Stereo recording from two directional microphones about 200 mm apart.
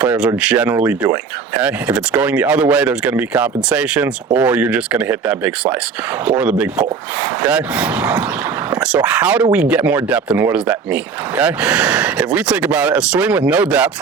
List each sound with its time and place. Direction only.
0.0 s speech: 5° right (ahead or behind)